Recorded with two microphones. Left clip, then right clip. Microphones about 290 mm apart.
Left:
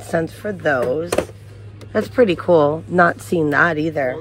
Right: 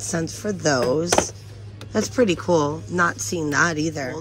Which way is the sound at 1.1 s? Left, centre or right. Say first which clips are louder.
Right 1 dB; centre.